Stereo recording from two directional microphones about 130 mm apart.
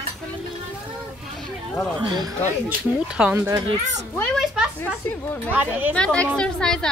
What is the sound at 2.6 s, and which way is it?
Speech, 10° right (ahead or behind).